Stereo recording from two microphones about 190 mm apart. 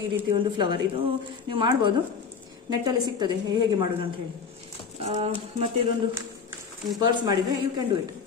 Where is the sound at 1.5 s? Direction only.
25° right (ahead or behind).